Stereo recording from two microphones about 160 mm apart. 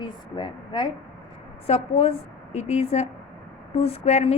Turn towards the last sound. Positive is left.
turn(degrees=40)  # may be behind; listen again after turning